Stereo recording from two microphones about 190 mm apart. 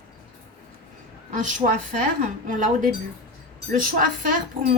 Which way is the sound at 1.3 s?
45° right (ahead or behind).